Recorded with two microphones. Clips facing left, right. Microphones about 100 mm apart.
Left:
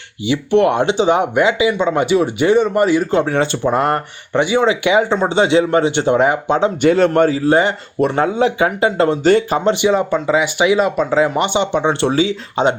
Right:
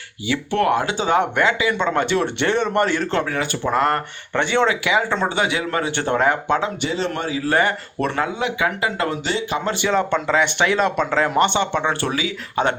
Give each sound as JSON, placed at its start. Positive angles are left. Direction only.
{"t": 0.3, "sound": "speech", "side_deg": 20}
{"t": 3.2, "sound": "speech", "side_deg": 25}
{"t": 6.8, "sound": "a man's voice", "side_deg": 55}
{"t": 7.4, "sound": "speech", "side_deg": 20}
{"t": 8.2, "sound": "speech", "side_deg": 30}
{"t": 9.2, "sound": "a man's voice", "side_deg": 45}
{"t": 9.8, "sound": "speech", "side_deg": 10}